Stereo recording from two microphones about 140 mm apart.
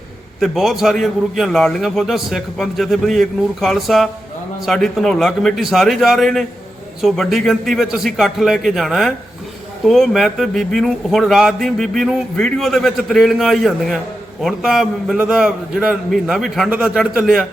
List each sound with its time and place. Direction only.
0.3 s speech: centre (ahead or behind)